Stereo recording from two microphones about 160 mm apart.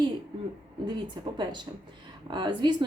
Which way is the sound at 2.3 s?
30° right (ahead or behind).